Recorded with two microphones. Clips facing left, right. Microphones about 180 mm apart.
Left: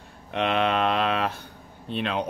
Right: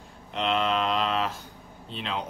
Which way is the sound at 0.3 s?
65° left (ahead or behind).